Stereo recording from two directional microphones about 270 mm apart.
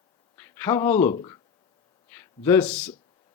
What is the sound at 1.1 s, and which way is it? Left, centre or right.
Speech, centre.